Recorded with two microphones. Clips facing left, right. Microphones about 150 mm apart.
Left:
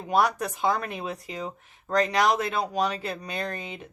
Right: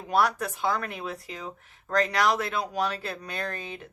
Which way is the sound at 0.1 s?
20° left (ahead or behind).